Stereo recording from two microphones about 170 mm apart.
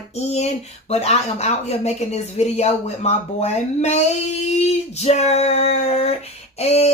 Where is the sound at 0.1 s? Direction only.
40° left (ahead or behind).